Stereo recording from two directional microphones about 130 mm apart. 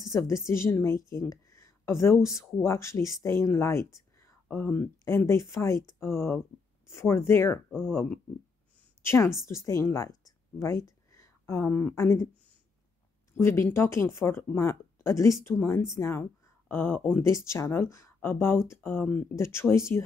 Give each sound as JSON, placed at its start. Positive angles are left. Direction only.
{"t": 0.0, "sound": "speech", "side_deg": 25}
{"t": 13.3, "sound": "speech", "side_deg": 20}